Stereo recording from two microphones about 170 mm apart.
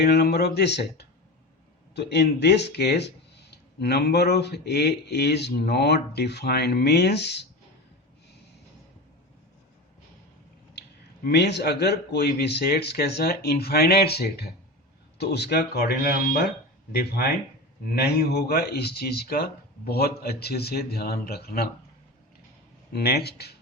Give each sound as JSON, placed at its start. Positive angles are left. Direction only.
{"t": 0.0, "sound": "speech", "side_deg": 75}
{"t": 10.8, "sound": "speech", "side_deg": 75}
{"t": 22.9, "sound": "speech", "side_deg": 70}